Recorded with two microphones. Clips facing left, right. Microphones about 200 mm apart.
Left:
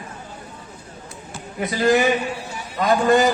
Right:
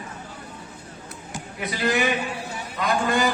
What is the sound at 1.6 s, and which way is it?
A man's voice, 45° left (ahead or behind).